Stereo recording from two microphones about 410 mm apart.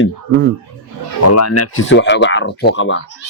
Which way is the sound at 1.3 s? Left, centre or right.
Left.